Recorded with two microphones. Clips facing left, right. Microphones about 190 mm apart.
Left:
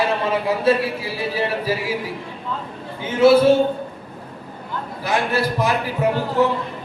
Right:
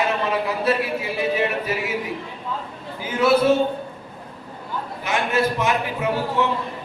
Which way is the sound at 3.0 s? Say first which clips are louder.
Left 5 dB; 25° left (ahead or behind).